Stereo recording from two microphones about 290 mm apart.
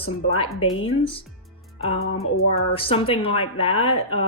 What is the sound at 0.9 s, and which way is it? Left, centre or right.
Speech, centre.